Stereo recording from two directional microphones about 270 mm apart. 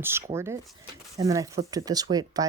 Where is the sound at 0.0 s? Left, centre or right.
Centre.